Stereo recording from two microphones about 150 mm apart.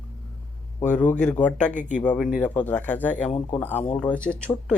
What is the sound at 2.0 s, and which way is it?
Speech, 5° left (ahead or behind).